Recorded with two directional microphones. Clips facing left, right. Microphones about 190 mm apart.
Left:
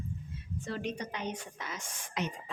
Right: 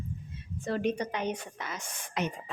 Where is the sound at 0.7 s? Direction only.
55° right (ahead or behind).